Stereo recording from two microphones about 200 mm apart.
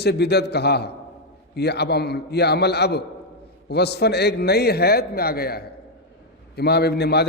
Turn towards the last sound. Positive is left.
turn(degrees=55)  # may be behind; listen again after turning